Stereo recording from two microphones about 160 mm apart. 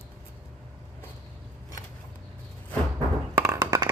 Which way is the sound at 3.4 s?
20° right (ahead or behind).